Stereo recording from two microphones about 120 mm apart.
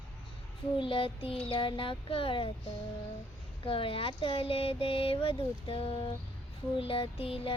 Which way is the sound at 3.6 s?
50° left (ahead or behind).